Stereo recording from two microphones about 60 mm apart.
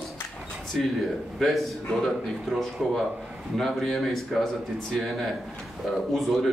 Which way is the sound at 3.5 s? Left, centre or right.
Centre.